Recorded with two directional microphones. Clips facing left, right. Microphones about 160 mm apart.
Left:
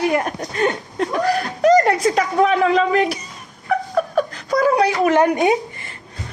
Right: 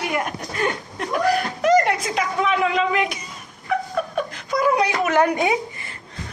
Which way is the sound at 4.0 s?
40° left (ahead or behind).